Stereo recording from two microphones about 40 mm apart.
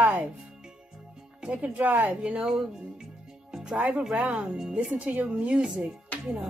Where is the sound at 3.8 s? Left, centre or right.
Right.